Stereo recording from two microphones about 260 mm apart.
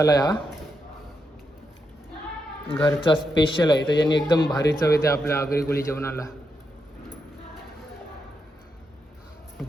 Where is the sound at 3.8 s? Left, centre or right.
Left.